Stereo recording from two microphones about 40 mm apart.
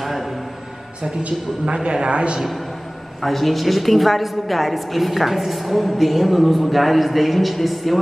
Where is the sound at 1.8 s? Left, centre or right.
Right.